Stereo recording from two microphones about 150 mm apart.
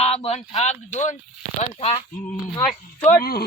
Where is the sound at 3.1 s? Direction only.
90° left.